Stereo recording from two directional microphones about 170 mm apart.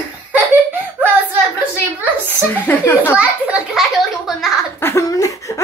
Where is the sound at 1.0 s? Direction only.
10° right (ahead or behind).